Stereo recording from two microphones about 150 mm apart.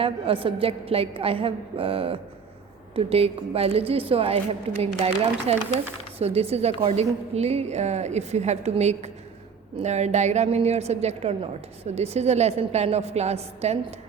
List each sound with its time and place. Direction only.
0.0 s a woman's voice: 35° right (ahead or behind)